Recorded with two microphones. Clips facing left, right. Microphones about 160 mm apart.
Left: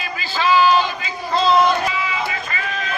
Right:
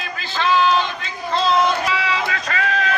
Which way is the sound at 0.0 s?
5° left (ahead or behind).